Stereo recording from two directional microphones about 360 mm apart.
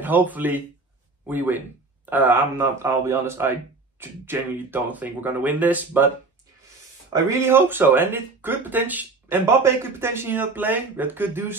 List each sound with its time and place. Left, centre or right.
0.0 s speech: centre
7.1 s speech: centre